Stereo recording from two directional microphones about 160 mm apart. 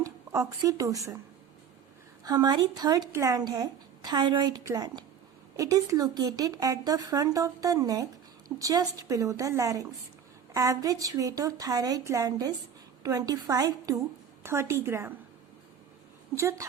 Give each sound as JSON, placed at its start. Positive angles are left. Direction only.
{"t": 0.0, "sound": "speech", "side_deg": -20}
{"t": 2.2, "sound": "a woman's voice", "side_deg": -25}
{"t": 16.3, "sound": "a woman's voice", "side_deg": -20}